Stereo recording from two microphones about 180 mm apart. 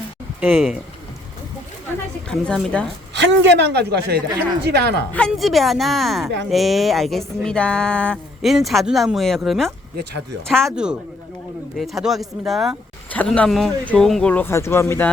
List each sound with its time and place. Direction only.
0.3 s speech: 5° right (ahead or behind)
2.4 s speech: 5° left (ahead or behind)
3.2 s speech: 80° right
5.1 s speech: 5° left (ahead or behind)
11.8 s speech: centre (ahead or behind)